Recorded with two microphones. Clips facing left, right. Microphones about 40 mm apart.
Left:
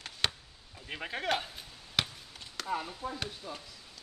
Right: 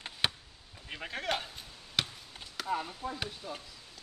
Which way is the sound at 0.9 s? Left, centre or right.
Centre.